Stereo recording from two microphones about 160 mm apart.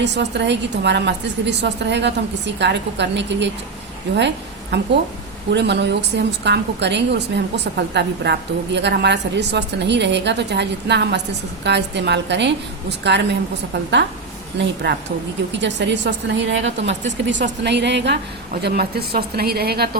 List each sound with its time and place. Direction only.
0.0 s a woman's voice: 90° right
4.7 s a woman's voice: 90° right
14.6 s a woman's voice: 90° right
18.6 s a woman's voice: 80° right